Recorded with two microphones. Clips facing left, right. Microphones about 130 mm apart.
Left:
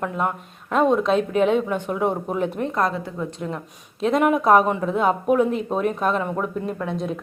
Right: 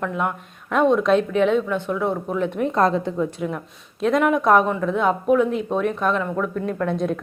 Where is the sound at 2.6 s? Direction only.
25° right (ahead or behind).